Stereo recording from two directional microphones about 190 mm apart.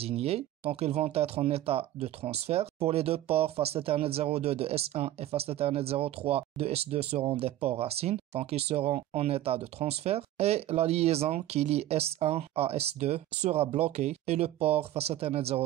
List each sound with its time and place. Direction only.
0.0 s speech: 30° right (ahead or behind)